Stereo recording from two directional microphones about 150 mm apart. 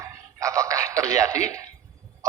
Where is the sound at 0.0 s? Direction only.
20° right (ahead or behind).